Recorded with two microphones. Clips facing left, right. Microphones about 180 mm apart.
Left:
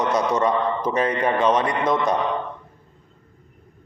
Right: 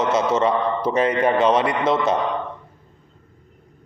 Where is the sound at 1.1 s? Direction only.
10° right (ahead or behind).